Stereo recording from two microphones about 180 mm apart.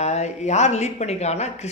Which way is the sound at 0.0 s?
40° left (ahead or behind).